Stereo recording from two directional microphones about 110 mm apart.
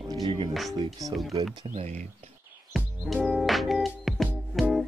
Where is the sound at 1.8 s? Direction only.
75° right (ahead or behind).